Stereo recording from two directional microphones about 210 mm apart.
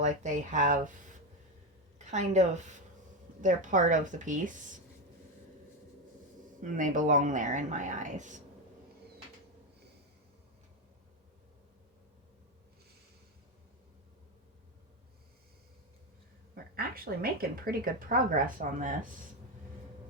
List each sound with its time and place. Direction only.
0.0 s speech: 35° right (ahead or behind)
2.0 s speech: 35° right (ahead or behind)
6.6 s speech: 40° right (ahead or behind)
16.7 s speech: 45° right (ahead or behind)